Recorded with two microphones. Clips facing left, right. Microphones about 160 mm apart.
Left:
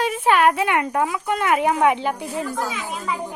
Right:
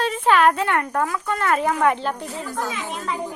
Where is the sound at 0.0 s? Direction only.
10° left (ahead or behind).